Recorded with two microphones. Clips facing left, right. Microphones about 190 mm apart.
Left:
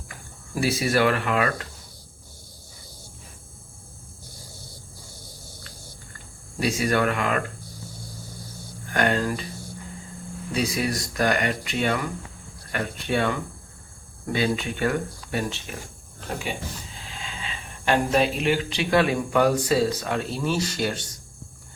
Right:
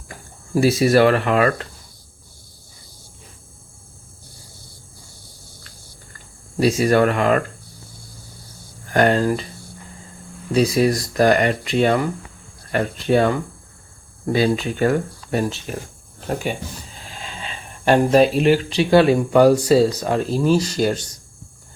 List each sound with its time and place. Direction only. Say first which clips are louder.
0.5 s speech: right 8 dB; 35° right (ahead or behind)
6.6 s speech: right 7 dB; 35° right (ahead or behind)
8.9 s speech: right 7 dB; 35° right (ahead or behind)
10.5 s speech: right 9 dB; 35° right (ahead or behind)
14.3 s speech: right 6 dB; 35° right (ahead or behind)
17.1 s speech: right 3 dB; 40° right (ahead or behind)